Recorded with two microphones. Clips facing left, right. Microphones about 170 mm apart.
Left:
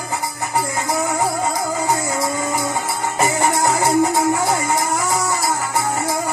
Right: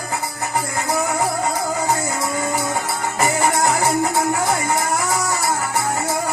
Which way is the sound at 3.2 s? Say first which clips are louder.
Even; 15° left (ahead or behind).